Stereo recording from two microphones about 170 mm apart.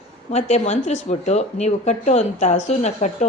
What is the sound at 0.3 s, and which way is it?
A woman's voice, 40° left (ahead or behind).